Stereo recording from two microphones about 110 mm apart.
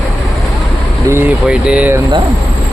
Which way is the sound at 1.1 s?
20° right (ahead or behind).